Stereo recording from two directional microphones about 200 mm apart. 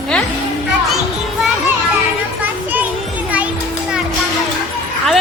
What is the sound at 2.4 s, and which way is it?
Music, 10° right (ahead or behind).